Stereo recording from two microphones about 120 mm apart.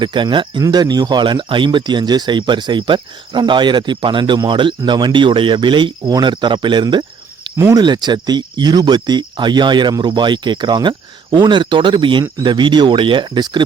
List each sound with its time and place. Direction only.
0.0 s speech: 40° right (ahead or behind)
7.5 s speech: 25° right (ahead or behind)
7.8 s speech: 35° right (ahead or behind)